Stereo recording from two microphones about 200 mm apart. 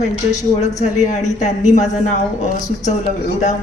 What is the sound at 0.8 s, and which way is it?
A woman's voice, 35° left (ahead or behind).